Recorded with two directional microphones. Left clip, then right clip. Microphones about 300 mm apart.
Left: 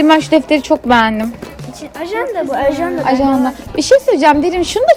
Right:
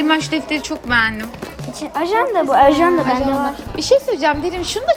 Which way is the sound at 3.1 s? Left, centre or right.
Centre.